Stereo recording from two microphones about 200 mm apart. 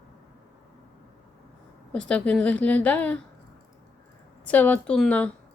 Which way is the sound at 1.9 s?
5° left (ahead or behind).